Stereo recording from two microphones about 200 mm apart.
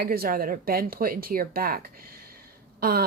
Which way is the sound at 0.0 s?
50° right (ahead or behind).